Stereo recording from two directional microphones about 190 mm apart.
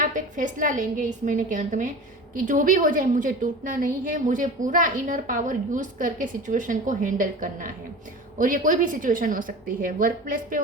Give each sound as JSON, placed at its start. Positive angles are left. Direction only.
{"t": 0.0, "sound": "a woman's voice", "side_deg": -45}